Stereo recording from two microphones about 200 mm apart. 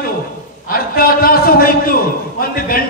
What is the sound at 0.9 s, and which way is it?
A man's voice, 45° left (ahead or behind).